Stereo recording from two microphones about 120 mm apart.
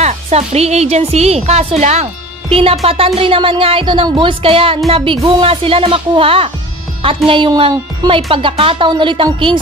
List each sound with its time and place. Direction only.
0.0 s speech: 60° right (ahead or behind)
2.5 s speech: 55° right (ahead or behind)